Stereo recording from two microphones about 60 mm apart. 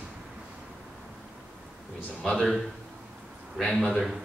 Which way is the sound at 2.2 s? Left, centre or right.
Centre.